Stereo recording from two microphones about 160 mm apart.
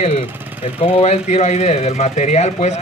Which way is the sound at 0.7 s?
40° left (ahead or behind).